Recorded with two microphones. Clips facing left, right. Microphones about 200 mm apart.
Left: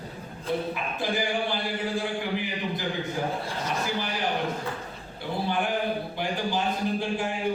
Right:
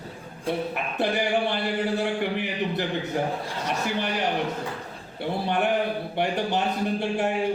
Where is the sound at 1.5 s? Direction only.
65° right (ahead or behind).